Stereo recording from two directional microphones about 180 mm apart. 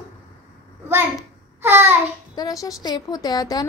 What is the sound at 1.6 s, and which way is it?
Babbling, 15° right (ahead or behind).